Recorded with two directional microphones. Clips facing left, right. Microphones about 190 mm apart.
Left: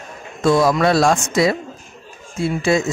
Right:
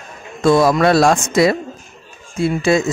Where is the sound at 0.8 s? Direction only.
60° right (ahead or behind).